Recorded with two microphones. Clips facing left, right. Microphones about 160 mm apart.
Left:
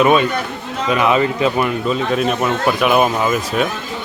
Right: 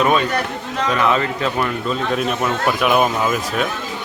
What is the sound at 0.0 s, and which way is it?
Speech, 10° left (ahead or behind).